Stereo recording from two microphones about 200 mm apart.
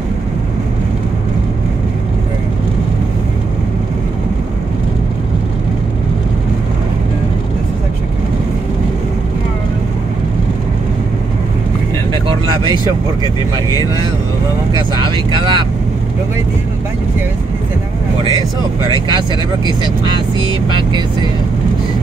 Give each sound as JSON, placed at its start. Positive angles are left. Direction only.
{"t": 12.3, "sound": "speech", "side_deg": -25}
{"t": 14.8, "sound": "speech", "side_deg": -25}